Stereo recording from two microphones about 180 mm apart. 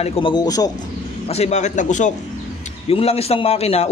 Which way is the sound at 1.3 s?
40° left (ahead or behind).